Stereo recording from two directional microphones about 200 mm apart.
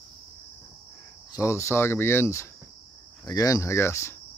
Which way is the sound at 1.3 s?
15° left (ahead or behind).